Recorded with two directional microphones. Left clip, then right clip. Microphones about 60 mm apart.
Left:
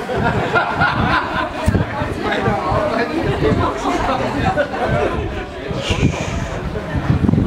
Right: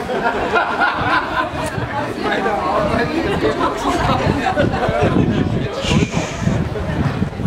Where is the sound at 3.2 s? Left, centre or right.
Right.